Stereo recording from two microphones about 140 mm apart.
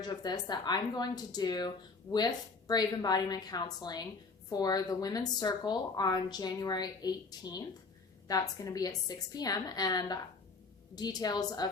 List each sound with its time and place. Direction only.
0.0 s a woman's voice: 30° left (ahead or behind)